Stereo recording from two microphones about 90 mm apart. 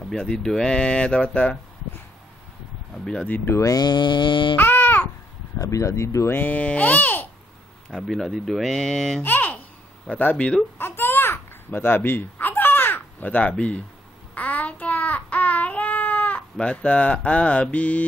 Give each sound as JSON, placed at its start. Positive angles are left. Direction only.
{"t": 0.1, "sound": "speech", "side_deg": 10}
{"t": 3.4, "sound": "speech", "side_deg": 35}
{"t": 4.6, "sound": "babbling", "side_deg": 20}
{"t": 5.6, "sound": "speech", "side_deg": 35}
{"t": 7.9, "sound": "speech", "side_deg": 5}
{"t": 9.2, "sound": "babbling", "side_deg": 20}
{"t": 10.0, "sound": "speech", "side_deg": 15}
{"t": 10.8, "sound": "babbling", "side_deg": 25}
{"t": 14.3, "sound": "child singing", "side_deg": 15}